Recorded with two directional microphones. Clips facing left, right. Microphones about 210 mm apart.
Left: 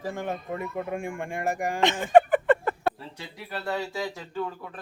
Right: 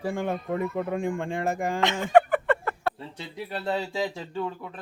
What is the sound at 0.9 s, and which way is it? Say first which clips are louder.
Speech: right 4 dB; 15° left (ahead or behind).